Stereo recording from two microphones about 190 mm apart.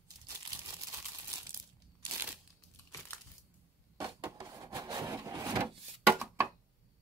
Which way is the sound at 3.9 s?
20° right (ahead or behind).